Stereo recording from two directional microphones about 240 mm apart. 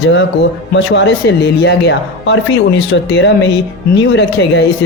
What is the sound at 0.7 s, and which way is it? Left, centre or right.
A woman's voice, left.